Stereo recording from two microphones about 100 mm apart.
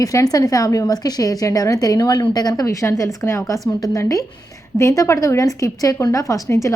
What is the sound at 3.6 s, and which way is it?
A woman's voice, 40° left (ahead or behind).